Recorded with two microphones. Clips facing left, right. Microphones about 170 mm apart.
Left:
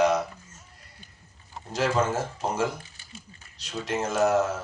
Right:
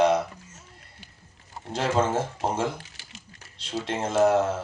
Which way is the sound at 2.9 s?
80° right.